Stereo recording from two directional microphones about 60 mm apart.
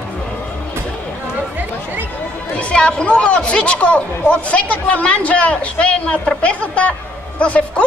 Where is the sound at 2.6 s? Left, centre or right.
Centre.